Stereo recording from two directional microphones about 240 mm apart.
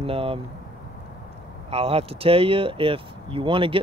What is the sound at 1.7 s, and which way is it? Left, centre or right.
Speech, right.